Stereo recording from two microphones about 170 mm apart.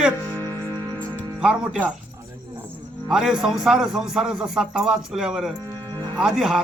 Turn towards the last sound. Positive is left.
turn(degrees=-5)  # may be behind; listen again after turning